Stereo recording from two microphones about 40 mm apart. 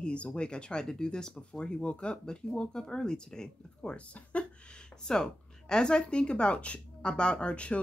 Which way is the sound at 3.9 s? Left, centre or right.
Left.